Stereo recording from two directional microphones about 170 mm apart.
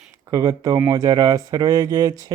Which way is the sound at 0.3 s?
20° right (ahead or behind).